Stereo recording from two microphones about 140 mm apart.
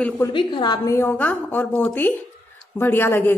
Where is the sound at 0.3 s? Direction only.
35° left (ahead or behind).